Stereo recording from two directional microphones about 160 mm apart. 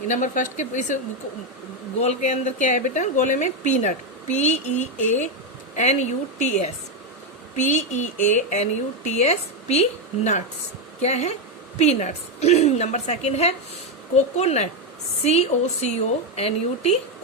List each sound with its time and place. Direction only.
0.1 s speech: 50° left (ahead or behind)
2.0 s speech: 45° left (ahead or behind)
11.0 s a woman's voice: 45° left (ahead or behind)